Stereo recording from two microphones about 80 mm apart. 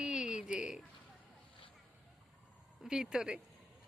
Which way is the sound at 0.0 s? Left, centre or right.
Centre.